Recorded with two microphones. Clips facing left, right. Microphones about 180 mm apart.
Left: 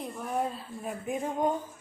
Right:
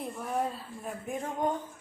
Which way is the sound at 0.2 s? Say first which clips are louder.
Left 1 dB; centre (ahead or behind).